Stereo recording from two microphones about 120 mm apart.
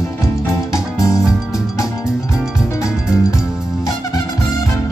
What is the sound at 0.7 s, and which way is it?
Music, 25° left (ahead or behind).